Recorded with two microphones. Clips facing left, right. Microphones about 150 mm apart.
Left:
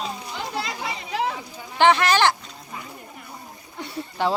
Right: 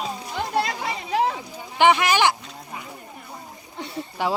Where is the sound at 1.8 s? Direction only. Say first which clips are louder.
Even; 10° right (ahead or behind).